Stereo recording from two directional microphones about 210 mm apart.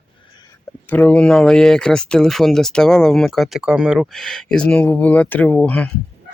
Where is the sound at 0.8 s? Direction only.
10° left (ahead or behind).